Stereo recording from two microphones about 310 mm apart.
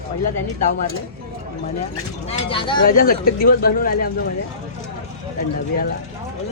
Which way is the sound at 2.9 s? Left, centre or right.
Left.